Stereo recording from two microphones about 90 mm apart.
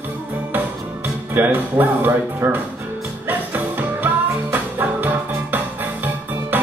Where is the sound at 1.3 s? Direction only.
20° right (ahead or behind).